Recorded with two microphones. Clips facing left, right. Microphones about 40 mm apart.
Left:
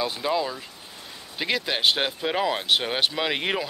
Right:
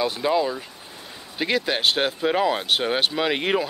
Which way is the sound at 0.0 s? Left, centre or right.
Centre.